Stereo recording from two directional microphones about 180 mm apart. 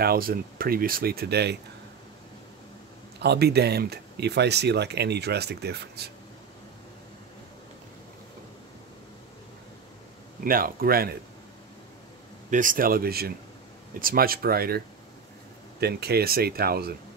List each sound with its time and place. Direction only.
0.0 s speech: 55° right (ahead or behind)
3.2 s speech: 65° right (ahead or behind)
10.4 s speech: 55° right (ahead or behind)
12.4 s speech: 45° right (ahead or behind)
15.8 s speech: 60° right (ahead or behind)